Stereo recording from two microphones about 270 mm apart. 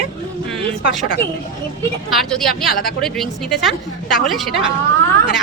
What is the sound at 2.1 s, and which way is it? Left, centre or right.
A woman's voice, centre.